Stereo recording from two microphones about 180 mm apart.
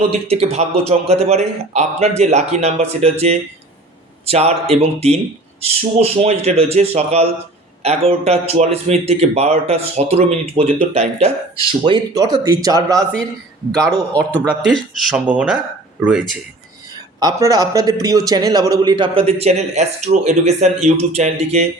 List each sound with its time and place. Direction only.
0.3 s speech: 35° right (ahead or behind)
11.9 s speech: 25° right (ahead or behind)
14.1 s speech: 10° left (ahead or behind); by 16.4 s 5° right (ahead or behind)
17.2 s speech: 20° right (ahead or behind); by 21.7 s 35° right (ahead or behind)